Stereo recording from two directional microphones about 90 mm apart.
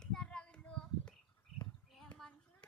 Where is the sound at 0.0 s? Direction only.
10° left (ahead or behind).